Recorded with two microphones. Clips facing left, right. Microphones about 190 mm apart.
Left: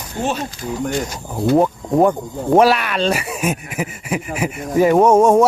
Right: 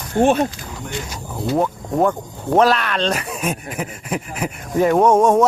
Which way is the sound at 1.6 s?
15° left (ahead or behind).